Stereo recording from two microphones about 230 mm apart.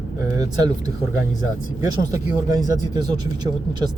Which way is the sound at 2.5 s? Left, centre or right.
Centre.